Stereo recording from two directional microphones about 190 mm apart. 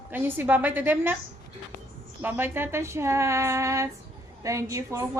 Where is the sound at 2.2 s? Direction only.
10° right (ahead or behind).